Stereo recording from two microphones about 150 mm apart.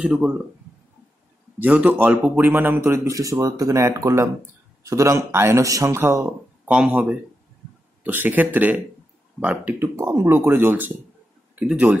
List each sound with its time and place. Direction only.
0.0 s speech: 5° right (ahead or behind)
1.6 s a man's voice: 10° right (ahead or behind)